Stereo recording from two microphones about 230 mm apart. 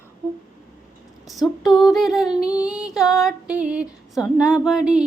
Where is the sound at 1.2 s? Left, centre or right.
Centre.